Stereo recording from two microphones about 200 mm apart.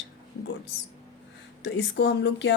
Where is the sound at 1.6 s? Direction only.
60° left (ahead or behind).